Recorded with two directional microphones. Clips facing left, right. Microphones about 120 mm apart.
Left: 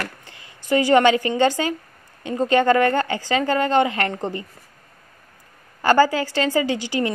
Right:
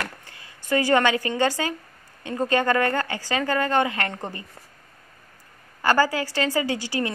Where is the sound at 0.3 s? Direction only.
20° left (ahead or behind).